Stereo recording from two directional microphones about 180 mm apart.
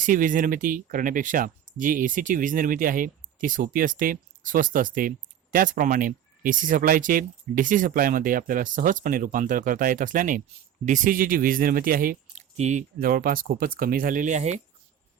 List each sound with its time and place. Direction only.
0.0 s speech: 50° right (ahead or behind)
12.5 s speech: 40° right (ahead or behind)
13.0 s speech: 55° right (ahead or behind)